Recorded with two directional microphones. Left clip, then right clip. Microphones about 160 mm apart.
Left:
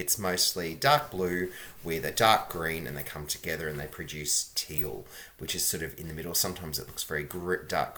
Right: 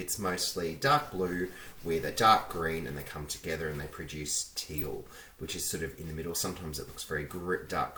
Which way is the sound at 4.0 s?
20° left (ahead or behind).